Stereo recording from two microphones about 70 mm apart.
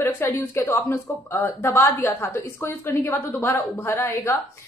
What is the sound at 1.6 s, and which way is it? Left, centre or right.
A woman's voice, left.